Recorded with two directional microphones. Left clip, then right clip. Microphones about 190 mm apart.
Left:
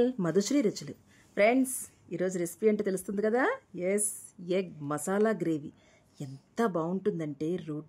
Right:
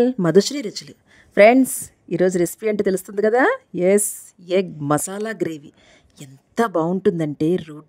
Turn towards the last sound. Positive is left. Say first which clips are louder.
# right 12 dB
turn(degrees=-50)  # may be behind; listen again after turning